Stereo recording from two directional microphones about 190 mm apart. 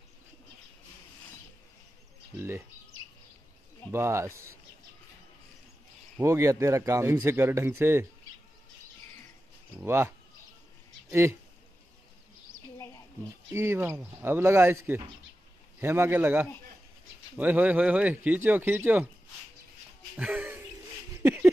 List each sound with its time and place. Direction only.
3.9 s a man's voice: 15° right (ahead or behind)
6.1 s a man's voice: 15° right (ahead or behind)
9.8 s a man's voice: 10° right (ahead or behind)
12.7 s a sound: 15° left (ahead or behind)
13.5 s a man's voice: 15° right (ahead or behind)
20.2 s a sound: 5° right (ahead or behind)